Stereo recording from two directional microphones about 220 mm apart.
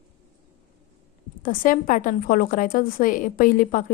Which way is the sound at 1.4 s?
40° left (ahead or behind).